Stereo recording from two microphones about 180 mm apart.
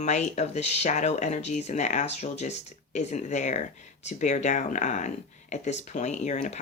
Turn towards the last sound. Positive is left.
turn(degrees=40)  # may be behind; listen again after turning